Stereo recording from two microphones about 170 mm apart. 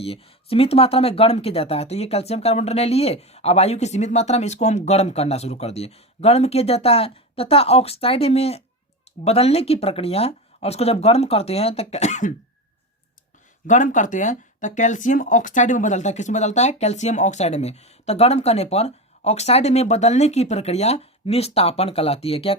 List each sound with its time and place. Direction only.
0.0 s speech: 35° left (ahead or behind)
13.7 s speech: 45° left (ahead or behind)